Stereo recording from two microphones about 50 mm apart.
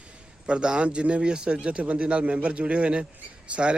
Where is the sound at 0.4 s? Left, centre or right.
Centre.